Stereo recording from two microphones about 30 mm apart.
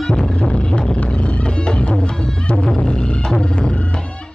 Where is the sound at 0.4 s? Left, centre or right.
Left.